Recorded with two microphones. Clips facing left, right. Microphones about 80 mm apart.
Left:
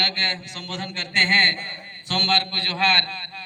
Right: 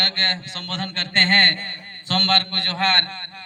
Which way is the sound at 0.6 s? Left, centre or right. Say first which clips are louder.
Right 2 dB; right.